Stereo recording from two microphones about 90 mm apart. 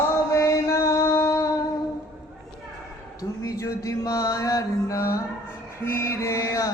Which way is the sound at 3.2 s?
40° left (ahead or behind).